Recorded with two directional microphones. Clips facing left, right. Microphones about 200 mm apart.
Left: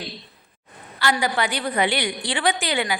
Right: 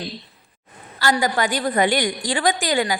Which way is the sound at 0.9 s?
40° right (ahead or behind).